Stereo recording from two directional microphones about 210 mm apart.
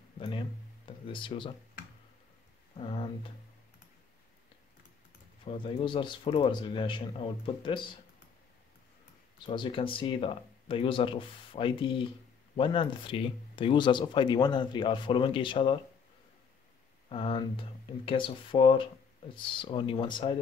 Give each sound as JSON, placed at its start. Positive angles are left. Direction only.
{"t": 0.8, "sound": "speech", "side_deg": 25}
{"t": 2.8, "sound": "speech", "side_deg": 25}
{"t": 5.4, "sound": "speech", "side_deg": 25}
{"t": 9.5, "sound": "speech", "side_deg": 25}
{"t": 17.1, "sound": "speech", "side_deg": 25}